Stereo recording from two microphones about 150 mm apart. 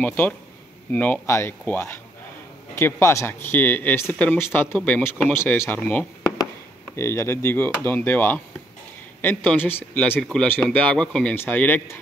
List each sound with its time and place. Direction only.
0.0 s speech: 10° left (ahead or behind)